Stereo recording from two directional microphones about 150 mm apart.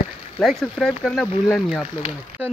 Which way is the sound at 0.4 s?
Centre (ahead or behind).